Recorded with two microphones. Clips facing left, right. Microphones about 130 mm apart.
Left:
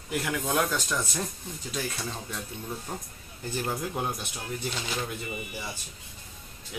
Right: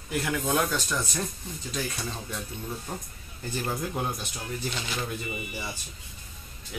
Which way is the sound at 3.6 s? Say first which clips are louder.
Right 1 dB; 10° left (ahead or behind).